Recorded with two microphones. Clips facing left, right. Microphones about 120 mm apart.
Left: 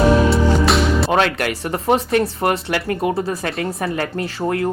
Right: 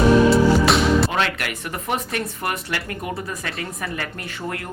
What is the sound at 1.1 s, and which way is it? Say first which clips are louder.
Speech: left 6 dB; 40° left (ahead or behind).